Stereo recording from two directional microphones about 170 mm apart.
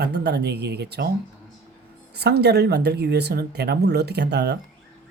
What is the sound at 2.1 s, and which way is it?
Speech, 75° right (ahead or behind).